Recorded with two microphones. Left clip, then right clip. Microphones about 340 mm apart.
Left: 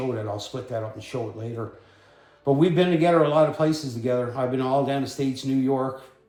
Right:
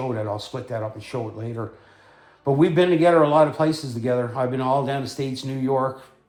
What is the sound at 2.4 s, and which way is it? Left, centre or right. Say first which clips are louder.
A man's voice: right 2 dB; right.